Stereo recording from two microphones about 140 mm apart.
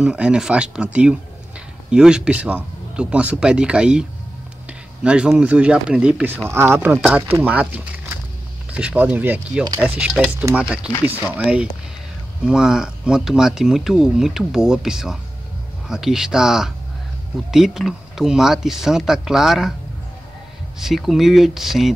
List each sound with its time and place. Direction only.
0.0 s speech: 5° right (ahead or behind)
6.9 s speech: 5° right (ahead or behind)
20.8 s speech: centre (ahead or behind)